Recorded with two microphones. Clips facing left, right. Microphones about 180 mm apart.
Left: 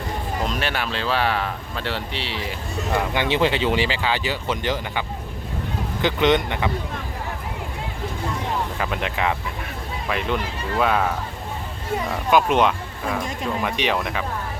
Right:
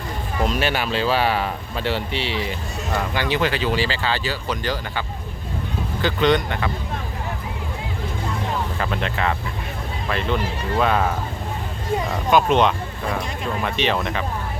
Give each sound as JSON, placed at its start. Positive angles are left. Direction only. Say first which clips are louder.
{"t": 0.5, "sound": "speech", "louder": "right 4 dB", "side_deg": -5}
{"t": 2.9, "sound": "speech", "louder": "left 1 dB", "side_deg": 15}
{"t": 3.2, "sound": "speech", "louder": "left 1 dB", "side_deg": 25}
{"t": 8.8, "sound": "speech", "louder": "right 1 dB", "side_deg": 10}
{"t": 12.3, "sound": "speech", "louder": "right 1 dB", "side_deg": 10}